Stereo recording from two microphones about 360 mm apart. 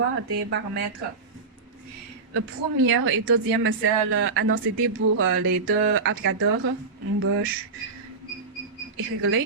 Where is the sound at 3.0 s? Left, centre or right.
Right.